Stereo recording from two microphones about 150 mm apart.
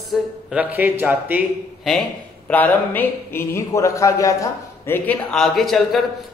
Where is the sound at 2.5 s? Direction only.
10° left (ahead or behind).